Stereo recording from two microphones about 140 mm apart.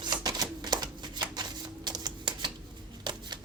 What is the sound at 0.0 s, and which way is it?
Shuffling cards, 30° right (ahead or behind).